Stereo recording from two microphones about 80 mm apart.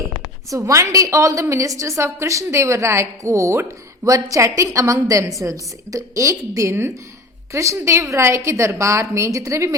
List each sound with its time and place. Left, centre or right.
0.7 s a woman's voice: right